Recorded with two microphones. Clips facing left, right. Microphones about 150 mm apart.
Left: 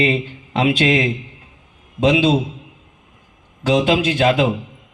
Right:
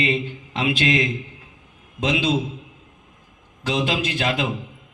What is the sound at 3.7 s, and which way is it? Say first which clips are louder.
Speech: left 7 dB; 40° left (ahead or behind).